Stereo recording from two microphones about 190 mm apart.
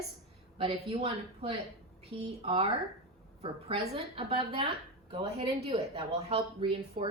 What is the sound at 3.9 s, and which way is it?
A woman's voice, 30° right (ahead or behind).